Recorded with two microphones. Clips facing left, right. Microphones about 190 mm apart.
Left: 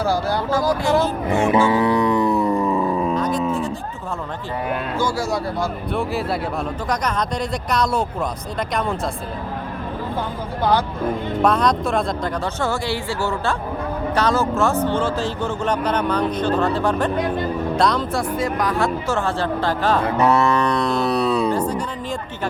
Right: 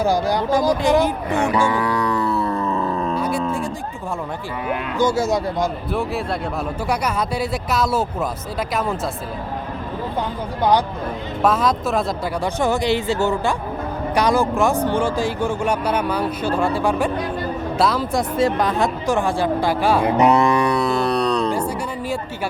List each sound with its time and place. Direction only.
0.0 s speech: 15° right (ahead or behind)
1.3 s music: 20° left (ahead or behind)
3.2 s livestock: 10° right (ahead or behind)
4.9 s speech: 20° right (ahead or behind)
5.9 s speech: centre (ahead or behind)
10.6 s speech: 15° right (ahead or behind)
11.4 s speech: 5° right (ahead or behind)
12.5 s speech: 15° right (ahead or behind)
18.1 s speech: 25° right (ahead or behind); by 21.5 s 5° left (ahead or behind)
21.5 s music: 10° right (ahead or behind)